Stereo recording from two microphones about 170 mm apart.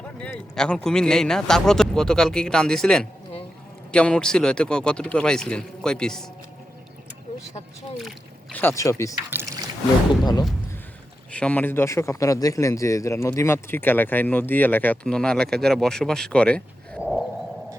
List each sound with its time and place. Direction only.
0.2 s speech: 5° left (ahead or behind)
8.5 s speech: 15° left (ahead or behind)
11.3 s speech: 5° left (ahead or behind)
17.0 s a sound: centre (ahead or behind)